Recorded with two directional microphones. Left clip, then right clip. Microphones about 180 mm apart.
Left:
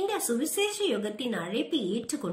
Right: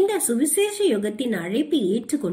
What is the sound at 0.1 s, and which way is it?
A woman's voice, 20° right (ahead or behind).